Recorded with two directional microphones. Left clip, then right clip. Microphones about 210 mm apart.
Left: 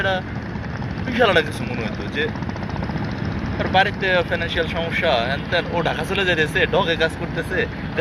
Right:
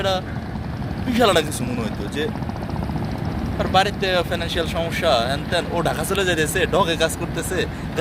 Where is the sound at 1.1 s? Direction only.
65° right (ahead or behind).